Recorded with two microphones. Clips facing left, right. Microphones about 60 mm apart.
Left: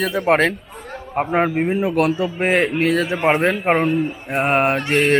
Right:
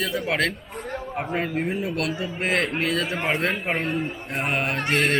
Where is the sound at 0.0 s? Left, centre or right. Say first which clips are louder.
Left 8 dB; left.